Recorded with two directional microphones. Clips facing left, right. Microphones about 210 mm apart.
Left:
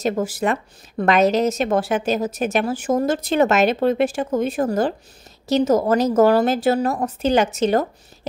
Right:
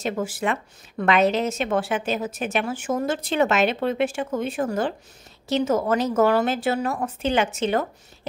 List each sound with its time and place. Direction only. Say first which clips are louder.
0.0 s a woman's voice: left 4 dB; 40° left (ahead or behind)